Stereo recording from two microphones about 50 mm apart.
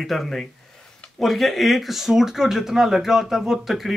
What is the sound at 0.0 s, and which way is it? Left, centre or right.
Speech, centre.